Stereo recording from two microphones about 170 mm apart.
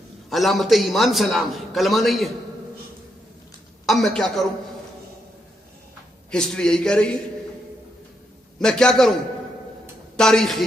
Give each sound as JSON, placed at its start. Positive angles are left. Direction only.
{"t": 0.3, "sound": "a man's voice", "side_deg": 0}
{"t": 3.8, "sound": "a man's voice", "side_deg": 0}
{"t": 6.3, "sound": "a man's voice", "side_deg": 5}
{"t": 8.5, "sound": "a man's voice", "side_deg": 5}
{"t": 10.1, "sound": "a man's voice", "side_deg": 5}